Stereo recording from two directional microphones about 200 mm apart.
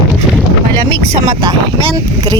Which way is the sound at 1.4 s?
25° right (ahead or behind).